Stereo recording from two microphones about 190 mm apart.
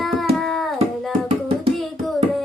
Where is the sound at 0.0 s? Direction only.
Centre (ahead or behind).